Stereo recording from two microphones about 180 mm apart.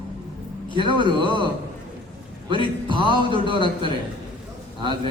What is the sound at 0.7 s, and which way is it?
Speech, 25° right (ahead or behind).